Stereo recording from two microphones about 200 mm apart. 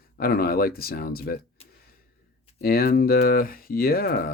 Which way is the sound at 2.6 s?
50° left (ahead or behind).